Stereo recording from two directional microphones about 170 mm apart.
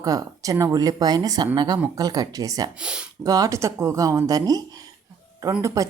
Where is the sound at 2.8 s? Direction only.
5° right (ahead or behind).